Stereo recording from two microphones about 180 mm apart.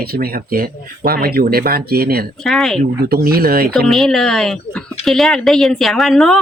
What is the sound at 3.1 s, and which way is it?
Speech, 55° right (ahead or behind).